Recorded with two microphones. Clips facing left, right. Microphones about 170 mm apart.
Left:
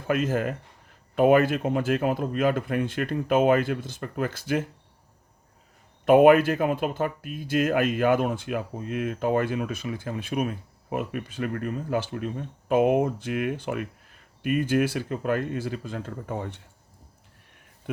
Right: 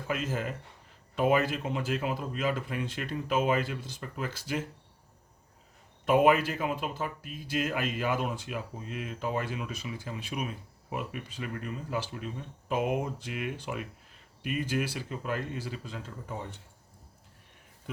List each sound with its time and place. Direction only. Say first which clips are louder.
0.1 s speech: left 8 dB; 55° left (ahead or behind)
6.1 s speech: left 8 dB; 55° left (ahead or behind)
17.9 s speech: left 8 dB; 60° left (ahead or behind)